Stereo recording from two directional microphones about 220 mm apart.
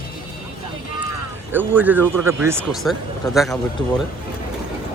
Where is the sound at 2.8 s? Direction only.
Centre (ahead or behind).